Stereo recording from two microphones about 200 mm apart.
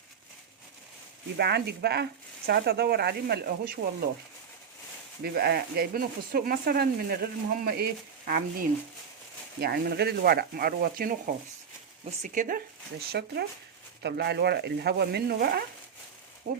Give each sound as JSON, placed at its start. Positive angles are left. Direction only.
{"t": 1.4, "sound": "speech", "side_deg": -55}
{"t": 5.2, "sound": "speech", "side_deg": -50}
{"t": 12.2, "sound": "speech", "side_deg": -40}
{"t": 13.1, "sound": "speech", "side_deg": -55}
{"t": 16.5, "sound": "speech", "side_deg": -35}